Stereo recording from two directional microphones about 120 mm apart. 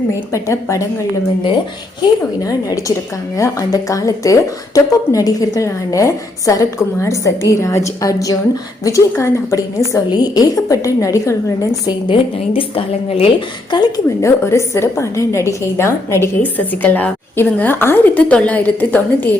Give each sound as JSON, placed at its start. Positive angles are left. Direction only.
{"t": 0.3, "sound": "a woman's voice", "side_deg": 25}
{"t": 3.3, "sound": "a woman's voice", "side_deg": 30}
{"t": 11.9, "sound": "speech", "side_deg": 45}
{"t": 13.7, "sound": "a woman's voice", "side_deg": 35}